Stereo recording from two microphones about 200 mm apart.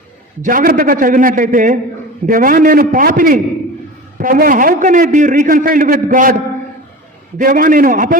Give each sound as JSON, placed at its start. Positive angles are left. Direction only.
{"t": 0.4, "sound": "a man's voice", "side_deg": -45}